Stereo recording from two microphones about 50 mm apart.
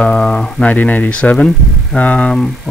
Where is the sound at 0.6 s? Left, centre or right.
Left.